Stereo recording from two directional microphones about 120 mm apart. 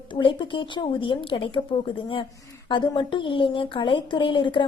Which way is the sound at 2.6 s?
40° left (ahead or behind).